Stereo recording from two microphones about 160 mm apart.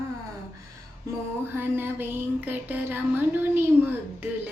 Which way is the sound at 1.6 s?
15° right (ahead or behind).